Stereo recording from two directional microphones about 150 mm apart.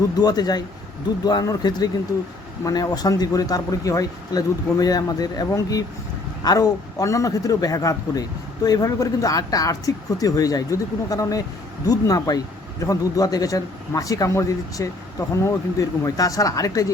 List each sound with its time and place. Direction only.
0.2 s speech: 25° left (ahead or behind)